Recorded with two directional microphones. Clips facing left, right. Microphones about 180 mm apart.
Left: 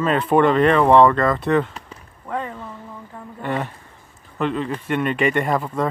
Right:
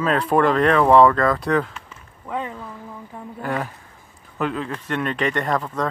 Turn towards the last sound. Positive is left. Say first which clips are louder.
# left 2 dB
turn(degrees=5)  # may be behind; listen again after turning